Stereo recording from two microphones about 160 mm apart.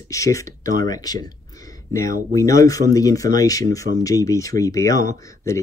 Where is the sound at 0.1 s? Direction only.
20° left (ahead or behind).